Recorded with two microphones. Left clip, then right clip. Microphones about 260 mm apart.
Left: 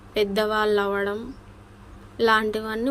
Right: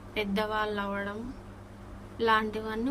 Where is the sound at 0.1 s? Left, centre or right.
Centre.